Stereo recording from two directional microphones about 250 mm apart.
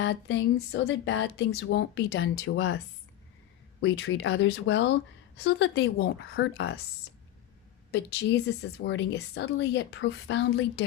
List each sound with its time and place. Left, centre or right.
0.0 s a woman's voice: left
7.9 s a woman's voice: left